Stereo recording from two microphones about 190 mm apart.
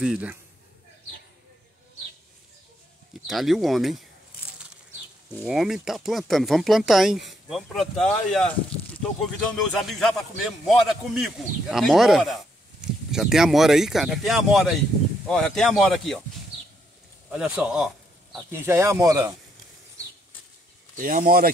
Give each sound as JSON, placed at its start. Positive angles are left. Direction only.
{"t": 0.0, "sound": "speech", "side_deg": -5}
{"t": 3.3, "sound": "speech", "side_deg": 0}
{"t": 5.4, "sound": "speech", "side_deg": 0}
{"t": 17.3, "sound": "speech", "side_deg": 0}
{"t": 18.5, "sound": "speech", "side_deg": -15}
{"t": 20.9, "sound": "speech", "side_deg": -45}